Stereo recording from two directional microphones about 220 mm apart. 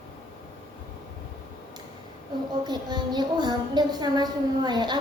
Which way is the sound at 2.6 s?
20° right (ahead or behind).